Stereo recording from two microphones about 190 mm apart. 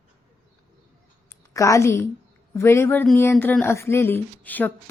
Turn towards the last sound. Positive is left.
turn(degrees=10)  # may be behind; listen again after turning